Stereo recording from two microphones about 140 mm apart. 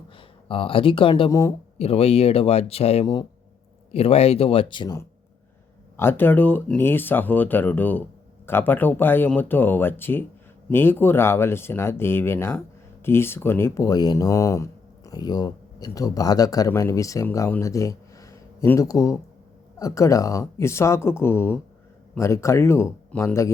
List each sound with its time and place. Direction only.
0.2 s speech: 40° left (ahead or behind)
1.3 s speech: 20° left (ahead or behind)
1.8 s speech: 45° left (ahead or behind)
6.0 s speech: 15° left (ahead or behind)